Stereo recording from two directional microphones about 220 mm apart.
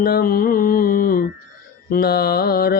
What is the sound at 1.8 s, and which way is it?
Speech, 45° left (ahead or behind).